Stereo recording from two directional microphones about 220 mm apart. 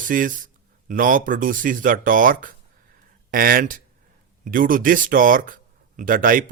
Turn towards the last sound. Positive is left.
turn(degrees=-40)  # may be behind; listen again after turning